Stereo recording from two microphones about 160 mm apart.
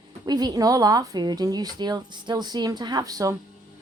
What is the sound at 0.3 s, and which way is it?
Speech, 25° right (ahead or behind).